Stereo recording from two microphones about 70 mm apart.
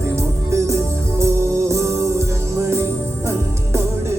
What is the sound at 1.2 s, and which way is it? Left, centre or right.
Music, right.